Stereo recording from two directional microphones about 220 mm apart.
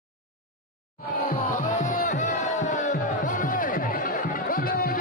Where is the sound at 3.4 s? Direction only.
40° left (ahead or behind).